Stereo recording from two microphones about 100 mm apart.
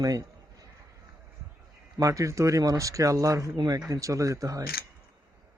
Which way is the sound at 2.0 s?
35° right (ahead or behind).